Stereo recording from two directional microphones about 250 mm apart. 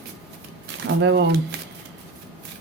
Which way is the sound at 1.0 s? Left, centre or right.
Right.